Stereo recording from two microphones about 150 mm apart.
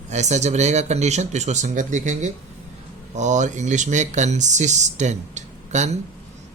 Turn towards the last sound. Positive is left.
turn(degrees=-50)  # may be behind; listen again after turning